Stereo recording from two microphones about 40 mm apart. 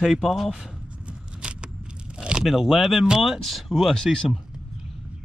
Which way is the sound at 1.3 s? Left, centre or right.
Right.